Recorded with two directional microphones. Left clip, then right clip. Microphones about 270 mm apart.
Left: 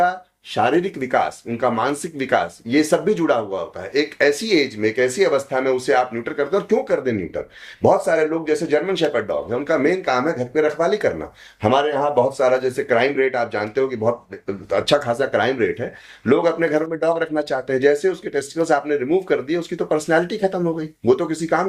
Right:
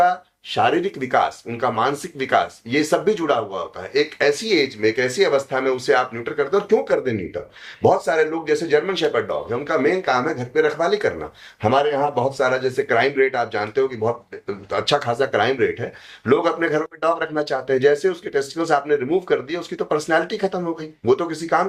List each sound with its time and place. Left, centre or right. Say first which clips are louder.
0.5 s speech: even; left